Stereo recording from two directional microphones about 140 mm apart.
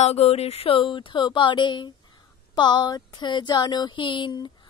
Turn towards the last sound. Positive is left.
turn(degrees=35)  # may be behind; listen again after turning